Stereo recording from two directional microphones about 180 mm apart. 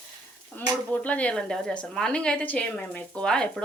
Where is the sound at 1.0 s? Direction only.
5° left (ahead or behind).